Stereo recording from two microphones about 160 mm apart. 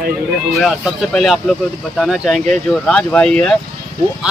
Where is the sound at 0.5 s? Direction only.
Centre (ahead or behind).